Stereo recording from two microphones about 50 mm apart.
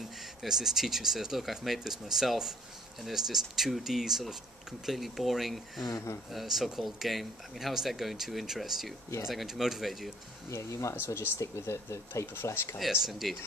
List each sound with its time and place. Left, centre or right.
0.2 s speech: centre
5.9 s speech: left
6.3 s speech: centre
10.5 s speech: left
13.0 s speech: centre